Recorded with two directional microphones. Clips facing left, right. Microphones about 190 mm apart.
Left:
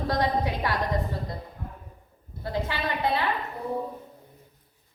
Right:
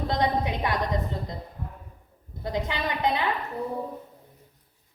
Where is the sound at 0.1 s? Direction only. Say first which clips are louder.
Even; 20° right (ahead or behind).